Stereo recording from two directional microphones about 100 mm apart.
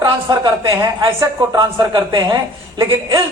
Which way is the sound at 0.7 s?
35° right (ahead or behind).